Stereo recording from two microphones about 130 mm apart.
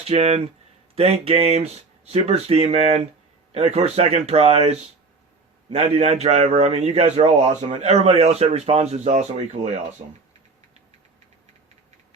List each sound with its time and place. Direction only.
0.1 s a man's voice: 55° right (ahead or behind)